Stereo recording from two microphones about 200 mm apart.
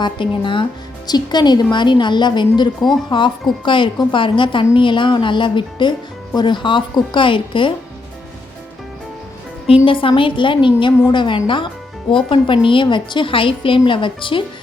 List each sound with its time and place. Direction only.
0.0 s a woman's voice: 25° left (ahead or behind)
9.8 s a woman's voice: 25° left (ahead or behind)